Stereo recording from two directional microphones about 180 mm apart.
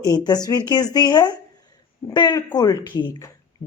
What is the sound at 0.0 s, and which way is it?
A woman's voice, 20° left (ahead or behind).